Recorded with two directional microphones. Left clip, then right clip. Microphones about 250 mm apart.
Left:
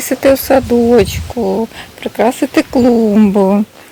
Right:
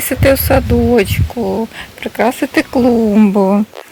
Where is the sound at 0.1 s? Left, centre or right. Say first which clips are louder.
Left 2 dB; centre.